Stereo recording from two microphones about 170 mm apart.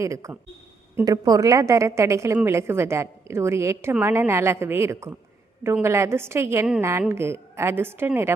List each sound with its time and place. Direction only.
0.0 s a woman's voice: 20° right (ahead or behind)